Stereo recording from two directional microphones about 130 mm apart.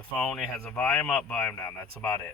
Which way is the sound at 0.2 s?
5° left (ahead or behind).